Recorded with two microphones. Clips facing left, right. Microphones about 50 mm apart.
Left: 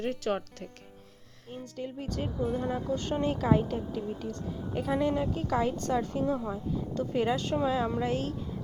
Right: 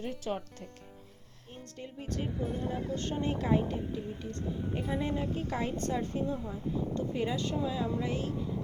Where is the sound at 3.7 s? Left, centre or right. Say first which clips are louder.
Left 3 dB; left.